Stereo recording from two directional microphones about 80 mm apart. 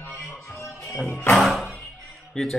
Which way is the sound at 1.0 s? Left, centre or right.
Left.